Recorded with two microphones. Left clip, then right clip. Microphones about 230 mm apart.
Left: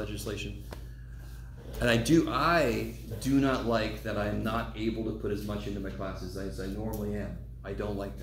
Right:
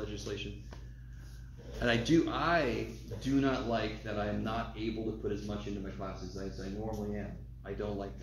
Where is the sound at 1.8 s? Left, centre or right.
Left.